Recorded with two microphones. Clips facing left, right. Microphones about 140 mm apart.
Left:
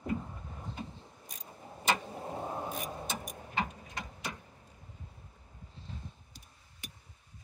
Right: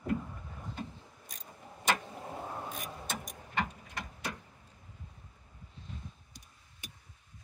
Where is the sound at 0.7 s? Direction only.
Centre (ahead or behind).